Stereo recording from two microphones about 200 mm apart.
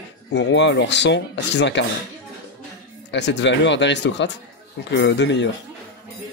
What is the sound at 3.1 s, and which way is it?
Speech, 60° left (ahead or behind).